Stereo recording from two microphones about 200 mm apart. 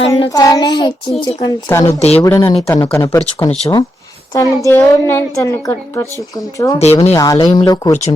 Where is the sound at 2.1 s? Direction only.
10° left (ahead or behind).